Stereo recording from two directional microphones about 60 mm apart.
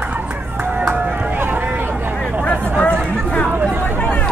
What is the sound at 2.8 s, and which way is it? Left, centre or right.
Chatter, centre.